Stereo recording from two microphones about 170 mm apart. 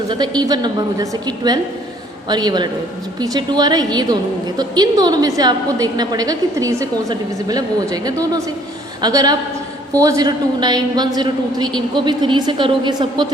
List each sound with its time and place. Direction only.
0.1 s a woman's voice: 25° right (ahead or behind)
2.3 s a woman's voice: 25° right (ahead or behind)